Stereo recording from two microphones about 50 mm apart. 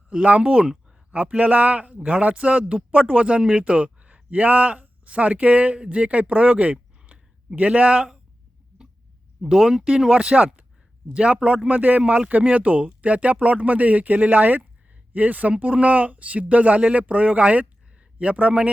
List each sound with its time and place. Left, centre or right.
0.1 s speech: right
1.1 s speech: right
9.4 s speech: centre; by 18.7 s right